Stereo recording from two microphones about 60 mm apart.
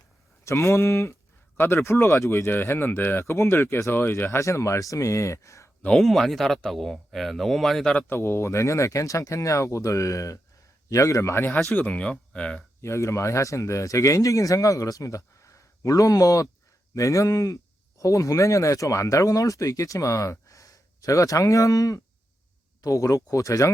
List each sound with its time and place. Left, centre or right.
0.4 s speech: left
4.3 s speech: left
5.9 s speech: centre
8.0 s speech: left
12.3 s speech: centre
12.8 s speech: left
20.5 s speech: left